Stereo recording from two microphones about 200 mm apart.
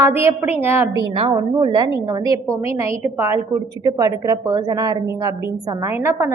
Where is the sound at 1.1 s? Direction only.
25° right (ahead or behind).